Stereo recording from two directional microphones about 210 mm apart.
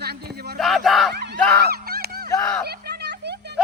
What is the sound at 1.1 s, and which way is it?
Speech, 50° right (ahead or behind).